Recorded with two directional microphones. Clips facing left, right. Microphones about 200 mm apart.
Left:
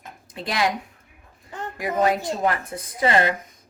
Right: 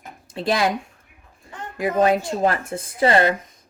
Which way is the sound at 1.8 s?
25° right (ahead or behind).